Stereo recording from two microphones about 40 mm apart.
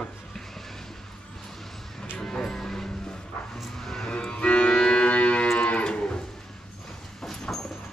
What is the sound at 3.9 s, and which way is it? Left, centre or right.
Cattle, centre.